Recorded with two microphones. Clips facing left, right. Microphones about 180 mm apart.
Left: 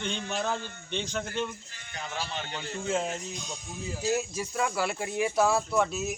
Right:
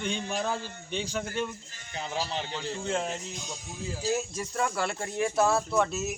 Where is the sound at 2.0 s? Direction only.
35° right (ahead or behind).